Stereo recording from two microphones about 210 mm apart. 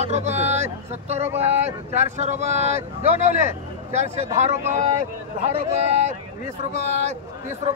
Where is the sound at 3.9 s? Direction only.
30° right (ahead or behind).